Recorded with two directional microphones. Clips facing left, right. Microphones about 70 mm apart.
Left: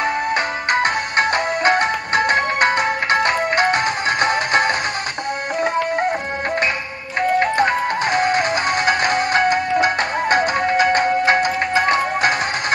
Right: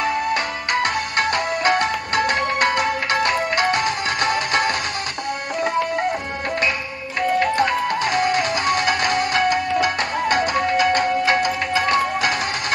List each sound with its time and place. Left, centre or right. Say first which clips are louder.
0.0 s music: left 1 dB; left
7.2 s music: left 2 dB; left